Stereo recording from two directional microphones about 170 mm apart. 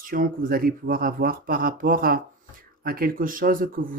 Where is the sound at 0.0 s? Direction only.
55° right (ahead or behind).